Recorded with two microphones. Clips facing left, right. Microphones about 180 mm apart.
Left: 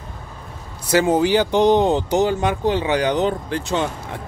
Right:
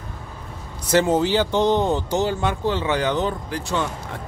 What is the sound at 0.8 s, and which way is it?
Speech, 10° left (ahead or behind).